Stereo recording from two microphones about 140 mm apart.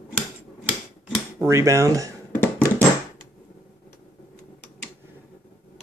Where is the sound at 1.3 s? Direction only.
20° right (ahead or behind).